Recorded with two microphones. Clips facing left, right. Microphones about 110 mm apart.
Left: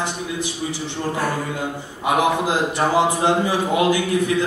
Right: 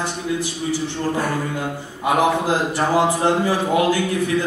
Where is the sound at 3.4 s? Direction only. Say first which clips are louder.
Right 1 dB; 15° left (ahead or behind).